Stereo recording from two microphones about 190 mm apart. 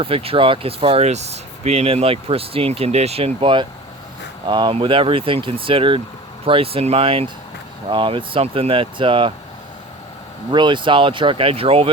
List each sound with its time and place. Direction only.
0.0 s speech: 30° right (ahead or behind)
10.5 s speech: 25° right (ahead or behind)